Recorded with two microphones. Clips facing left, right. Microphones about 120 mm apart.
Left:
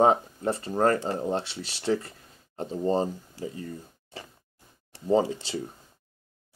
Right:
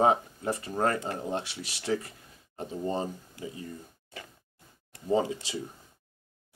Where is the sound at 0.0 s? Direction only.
35° left (ahead or behind).